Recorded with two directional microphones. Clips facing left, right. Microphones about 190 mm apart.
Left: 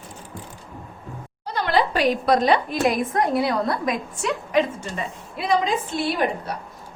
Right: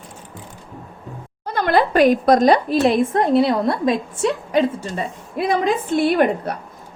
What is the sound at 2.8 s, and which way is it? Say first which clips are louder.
A woman's voice: right 4 dB; 25° right (ahead or behind).